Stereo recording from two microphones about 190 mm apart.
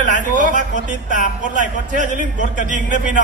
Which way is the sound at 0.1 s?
40° right (ahead or behind).